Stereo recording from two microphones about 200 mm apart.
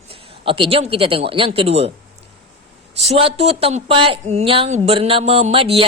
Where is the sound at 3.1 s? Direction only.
30° right (ahead or behind).